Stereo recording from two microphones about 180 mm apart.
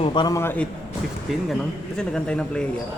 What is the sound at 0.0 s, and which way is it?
Speech, 25° left (ahead or behind).